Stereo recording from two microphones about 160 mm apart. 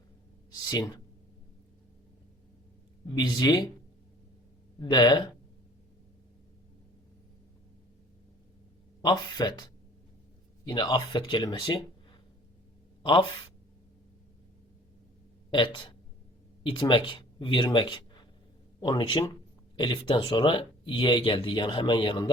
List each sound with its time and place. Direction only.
0.7 s speech: 25° left (ahead or behind)
3.2 s speech: 25° left (ahead or behind)
4.8 s speech: 30° left (ahead or behind)
9.0 s speech: 25° left (ahead or behind)
13.0 s speech: 30° left (ahead or behind)
15.4 s speech: 30° left (ahead or behind)